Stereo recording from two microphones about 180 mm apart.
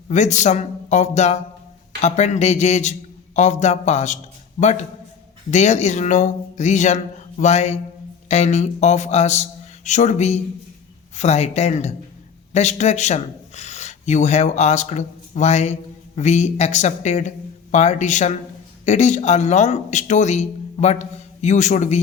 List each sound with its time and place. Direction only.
0.1 s speech: 40° left (ahead or behind)